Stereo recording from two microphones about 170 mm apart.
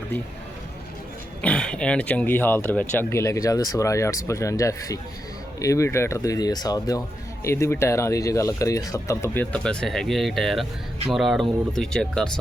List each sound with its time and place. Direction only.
1.4 s speech: 5° left (ahead or behind)